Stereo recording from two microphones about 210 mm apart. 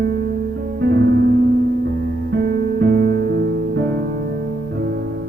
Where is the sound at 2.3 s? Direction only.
55° right (ahead or behind).